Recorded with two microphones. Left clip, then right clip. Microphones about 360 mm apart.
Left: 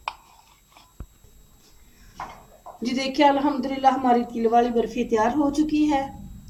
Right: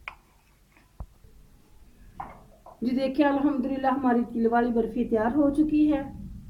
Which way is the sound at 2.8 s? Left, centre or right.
Left.